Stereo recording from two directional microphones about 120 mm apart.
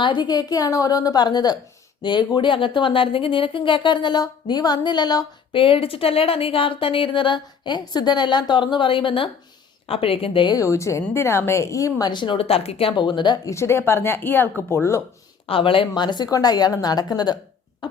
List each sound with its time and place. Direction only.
0.0 s speech: 40° left (ahead or behind)
5.5 s speech: 50° left (ahead or behind)
10.6 s a woman's voice: 25° left (ahead or behind)
15.4 s speech: 50° left (ahead or behind)